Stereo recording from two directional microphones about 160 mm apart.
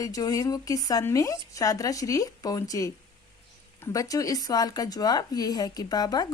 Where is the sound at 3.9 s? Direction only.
20° left (ahead or behind).